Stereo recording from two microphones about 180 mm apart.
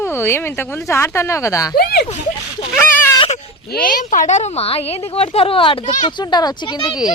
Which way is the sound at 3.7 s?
50° left (ahead or behind).